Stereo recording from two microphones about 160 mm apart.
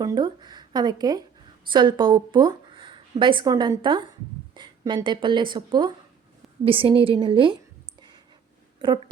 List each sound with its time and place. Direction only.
0.0 s a woman's voice: 25° right (ahead or behind)
8.8 s speech: 30° right (ahead or behind)